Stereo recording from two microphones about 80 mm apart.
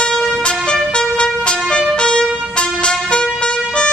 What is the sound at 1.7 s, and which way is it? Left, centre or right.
Music, centre.